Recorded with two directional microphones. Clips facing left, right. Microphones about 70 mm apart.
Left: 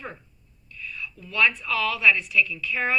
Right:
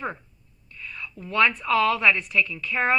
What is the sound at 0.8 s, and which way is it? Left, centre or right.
A woman's voice, right.